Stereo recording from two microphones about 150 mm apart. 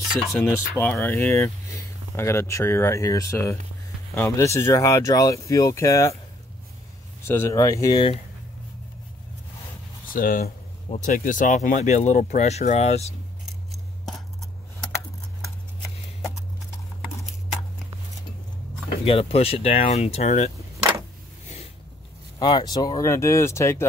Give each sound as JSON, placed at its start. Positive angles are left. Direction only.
{"t": 0.4, "sound": "speech", "side_deg": 15}
{"t": 7.2, "sound": "speech", "side_deg": 20}
{"t": 10.1, "sound": "speech", "side_deg": 70}
{"t": 10.9, "sound": "speech", "side_deg": 55}
{"t": 13.7, "sound": "scissors", "side_deg": 0}
{"t": 19.0, "sound": "speech", "side_deg": 40}
{"t": 22.4, "sound": "speech", "side_deg": 30}